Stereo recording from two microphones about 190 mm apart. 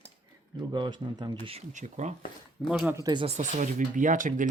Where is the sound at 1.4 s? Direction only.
35° right (ahead or behind).